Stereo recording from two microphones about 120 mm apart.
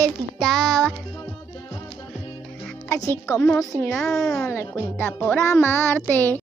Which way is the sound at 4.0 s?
5° left (ahead or behind).